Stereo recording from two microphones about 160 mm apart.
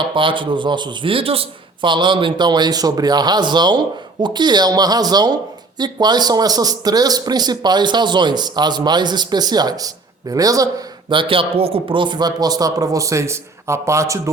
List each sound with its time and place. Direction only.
0.0 s speech: 30° right (ahead or behind)